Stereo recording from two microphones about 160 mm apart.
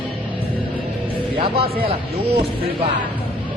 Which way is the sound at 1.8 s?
35° right (ahead or behind).